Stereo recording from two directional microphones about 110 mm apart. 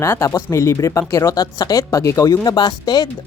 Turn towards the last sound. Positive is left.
turn(degrees=40)  # may be behind; listen again after turning